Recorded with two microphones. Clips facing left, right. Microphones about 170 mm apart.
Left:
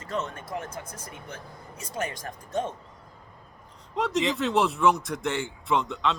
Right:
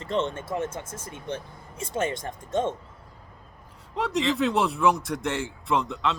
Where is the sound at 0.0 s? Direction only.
25° right (ahead or behind).